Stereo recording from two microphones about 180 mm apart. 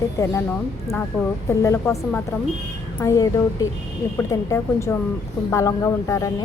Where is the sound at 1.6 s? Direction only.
15° left (ahead or behind).